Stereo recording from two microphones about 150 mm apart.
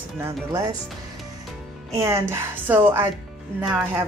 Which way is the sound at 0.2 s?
20° right (ahead or behind).